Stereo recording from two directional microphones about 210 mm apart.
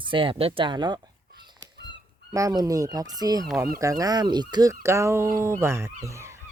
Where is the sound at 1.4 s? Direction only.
20° right (ahead or behind).